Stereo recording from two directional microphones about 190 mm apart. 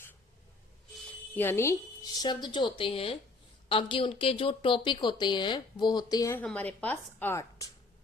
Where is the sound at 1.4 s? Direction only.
10° left (ahead or behind).